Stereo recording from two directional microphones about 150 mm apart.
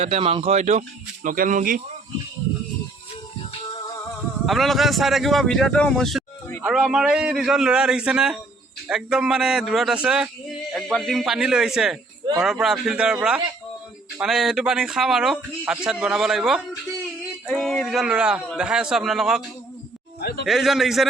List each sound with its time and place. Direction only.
0.0 s speech: 40° right (ahead or behind); by 1.8 s 65° right (ahead or behind)
3.8 s music: 25° left (ahead or behind)
4.4 s speech: centre (ahead or behind)
17.4 s a sound: centre (ahead or behind)
18.5 s speech: 5° right (ahead or behind)
20.2 s speech: 90° left
20.5 s speech: centre (ahead or behind)